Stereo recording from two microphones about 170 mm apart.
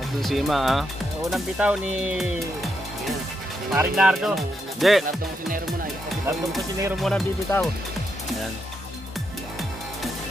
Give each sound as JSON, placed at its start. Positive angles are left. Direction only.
{"t": 0.2, "sound": "speech", "side_deg": 0}
{"t": 7.0, "sound": "speech", "side_deg": 0}
{"t": 7.5, "sound": "speech", "side_deg": 20}